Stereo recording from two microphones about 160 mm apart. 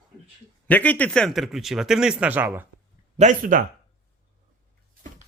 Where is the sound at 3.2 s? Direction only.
55° right (ahead or behind).